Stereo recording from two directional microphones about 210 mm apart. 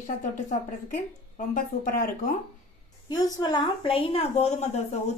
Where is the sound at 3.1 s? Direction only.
20° left (ahead or behind).